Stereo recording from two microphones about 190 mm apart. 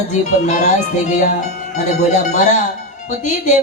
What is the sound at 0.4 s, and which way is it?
Speech, 40° left (ahead or behind).